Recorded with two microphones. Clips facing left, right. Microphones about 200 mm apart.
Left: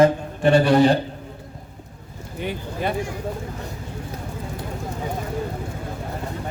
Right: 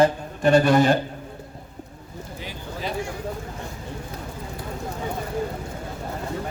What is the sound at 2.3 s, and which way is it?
Speech, 60° left (ahead or behind).